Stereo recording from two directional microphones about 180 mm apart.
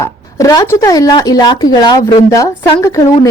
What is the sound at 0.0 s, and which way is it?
A woman's voice, 20° left (ahead or behind).